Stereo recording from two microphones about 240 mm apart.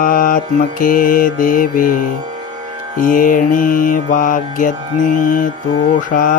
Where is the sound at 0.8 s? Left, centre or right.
Left.